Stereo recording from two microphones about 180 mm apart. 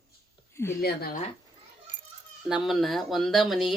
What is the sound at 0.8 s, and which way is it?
Speech, 60° left (ahead or behind).